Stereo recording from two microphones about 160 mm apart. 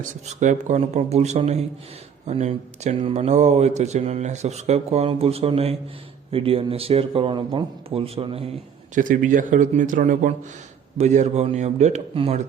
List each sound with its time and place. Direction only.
0.0 s a man's voice: 50° right (ahead or behind)
9.0 s a man's voice: 55° right (ahead or behind); by 12.4 s 40° right (ahead or behind)